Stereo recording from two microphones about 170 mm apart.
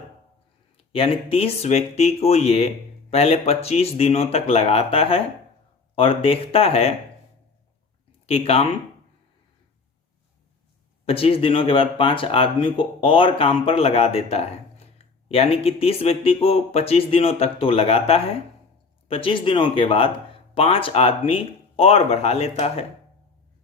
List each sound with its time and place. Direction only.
0.8 s speech: 35° left (ahead or behind)
8.3 s speech: 35° left (ahead or behind)
11.0 s speech: 35° left (ahead or behind)